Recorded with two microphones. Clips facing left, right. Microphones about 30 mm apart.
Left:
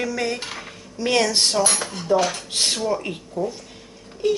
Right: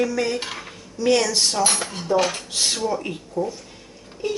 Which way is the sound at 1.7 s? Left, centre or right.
Centre.